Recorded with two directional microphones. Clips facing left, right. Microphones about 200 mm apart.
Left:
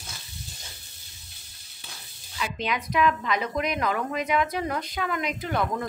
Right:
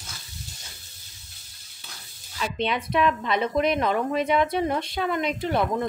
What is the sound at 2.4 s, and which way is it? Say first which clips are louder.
A woman's voice: right 3 dB; 30° right (ahead or behind).